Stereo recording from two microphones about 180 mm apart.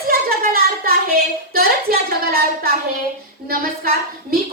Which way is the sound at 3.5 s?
55° right (ahead or behind).